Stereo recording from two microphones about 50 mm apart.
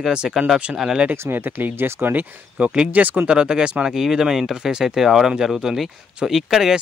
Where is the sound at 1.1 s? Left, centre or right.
Right.